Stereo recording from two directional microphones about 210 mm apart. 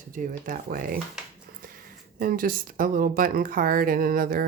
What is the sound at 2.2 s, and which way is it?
Speech, 40° right (ahead or behind).